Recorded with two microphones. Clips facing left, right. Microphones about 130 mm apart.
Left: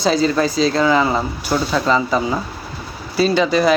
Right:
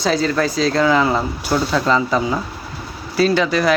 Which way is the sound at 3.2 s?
15° left (ahead or behind).